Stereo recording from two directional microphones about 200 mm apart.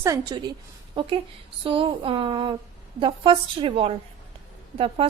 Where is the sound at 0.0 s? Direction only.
20° right (ahead or behind).